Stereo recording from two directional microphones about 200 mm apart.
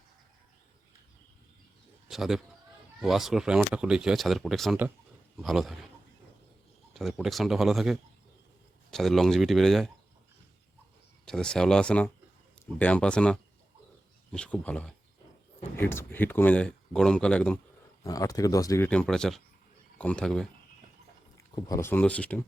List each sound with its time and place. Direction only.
2.0 s speech: centre (ahead or behind)
6.9 s speech: centre (ahead or behind)
11.3 s speech: 5° left (ahead or behind)
18.0 s speech: 15° left (ahead or behind)
18.9 s speech: 5° left (ahead or behind)
21.3 s speech: 15° left (ahead or behind)